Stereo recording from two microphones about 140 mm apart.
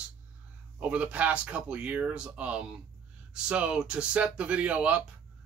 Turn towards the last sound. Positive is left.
turn(degrees=-10)  # may be behind; listen again after turning